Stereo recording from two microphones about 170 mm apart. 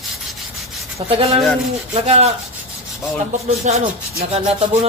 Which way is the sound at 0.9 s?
35° right (ahead or behind).